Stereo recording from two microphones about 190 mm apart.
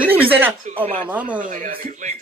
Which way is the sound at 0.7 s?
40° right (ahead or behind).